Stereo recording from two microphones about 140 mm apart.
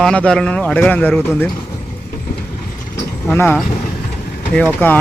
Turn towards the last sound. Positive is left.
turn(degrees=10)  # may be behind; listen again after turning